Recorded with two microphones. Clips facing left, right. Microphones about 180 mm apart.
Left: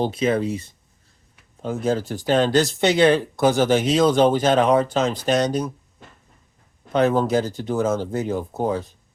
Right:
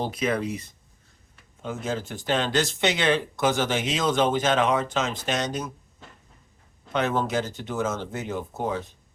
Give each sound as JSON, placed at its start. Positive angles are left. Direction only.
{"t": 0.0, "sound": "speech", "side_deg": 25}
{"t": 6.9, "sound": "speech", "side_deg": 35}